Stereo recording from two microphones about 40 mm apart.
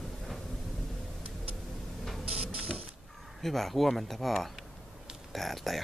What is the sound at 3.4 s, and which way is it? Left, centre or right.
Speech, centre.